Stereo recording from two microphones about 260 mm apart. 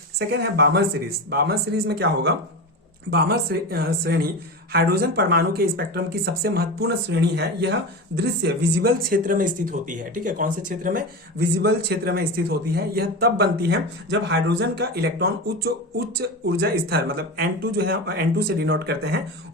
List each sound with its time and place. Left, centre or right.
0.2 s a man's voice: right